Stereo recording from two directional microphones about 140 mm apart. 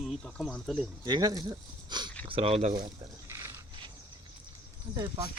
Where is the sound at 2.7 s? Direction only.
30° right (ahead or behind).